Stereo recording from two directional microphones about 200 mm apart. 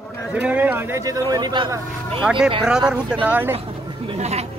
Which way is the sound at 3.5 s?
30° right (ahead or behind).